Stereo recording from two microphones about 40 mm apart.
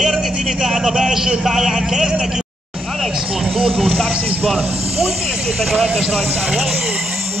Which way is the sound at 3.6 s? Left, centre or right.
Centre.